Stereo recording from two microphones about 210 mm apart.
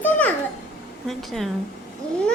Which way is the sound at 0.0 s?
5° left (ahead or behind).